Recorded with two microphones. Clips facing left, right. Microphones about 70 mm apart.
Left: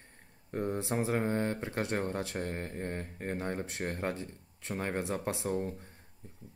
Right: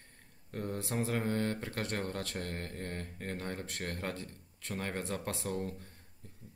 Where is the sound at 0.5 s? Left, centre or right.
Left.